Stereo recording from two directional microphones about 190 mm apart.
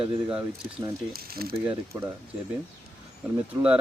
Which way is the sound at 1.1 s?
55° right (ahead or behind).